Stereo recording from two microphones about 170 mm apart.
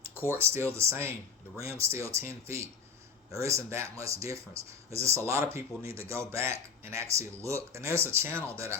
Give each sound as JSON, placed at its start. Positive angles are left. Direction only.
{"t": 0.3, "sound": "speech", "side_deg": -15}